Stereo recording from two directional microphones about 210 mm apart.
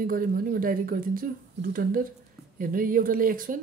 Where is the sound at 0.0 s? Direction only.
45° right (ahead or behind).